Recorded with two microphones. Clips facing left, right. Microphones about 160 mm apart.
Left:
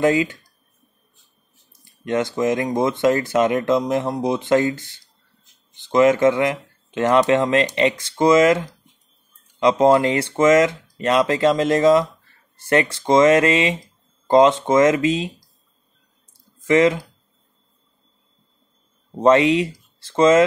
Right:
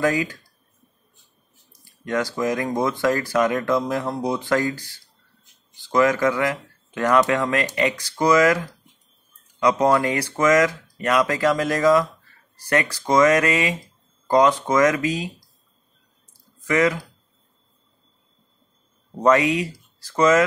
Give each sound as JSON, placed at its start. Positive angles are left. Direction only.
{"t": 0.0, "sound": "speech", "side_deg": 25}
{"t": 1.7, "sound": "speech", "side_deg": 20}
{"t": 16.3, "sound": "clicking", "side_deg": 25}
{"t": 19.1, "sound": "speech", "side_deg": 25}